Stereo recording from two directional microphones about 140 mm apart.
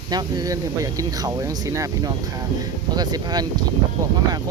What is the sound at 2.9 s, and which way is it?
Speech, 30° right (ahead or behind).